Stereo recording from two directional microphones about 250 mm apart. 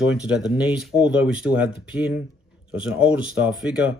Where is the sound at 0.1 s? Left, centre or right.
Centre.